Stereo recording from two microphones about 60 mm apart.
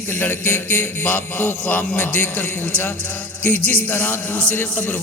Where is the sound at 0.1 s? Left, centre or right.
Left.